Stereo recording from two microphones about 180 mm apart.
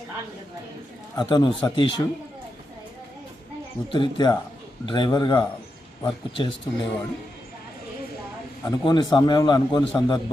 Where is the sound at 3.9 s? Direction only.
25° left (ahead or behind).